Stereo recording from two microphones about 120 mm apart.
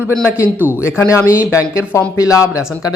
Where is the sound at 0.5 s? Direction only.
15° right (ahead or behind).